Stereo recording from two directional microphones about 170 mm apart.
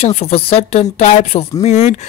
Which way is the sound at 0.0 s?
35° left (ahead or behind).